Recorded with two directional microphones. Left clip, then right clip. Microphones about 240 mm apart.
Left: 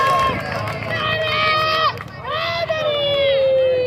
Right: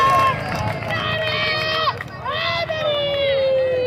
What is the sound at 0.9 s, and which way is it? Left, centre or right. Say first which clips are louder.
Run: left 3 dB; centre.